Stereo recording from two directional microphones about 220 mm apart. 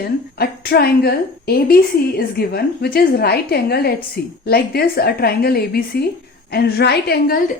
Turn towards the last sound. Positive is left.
turn(degrees=45)  # may be behind; listen again after turning